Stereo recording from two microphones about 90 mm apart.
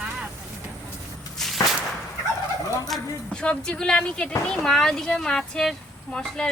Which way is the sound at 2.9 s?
10° left (ahead or behind).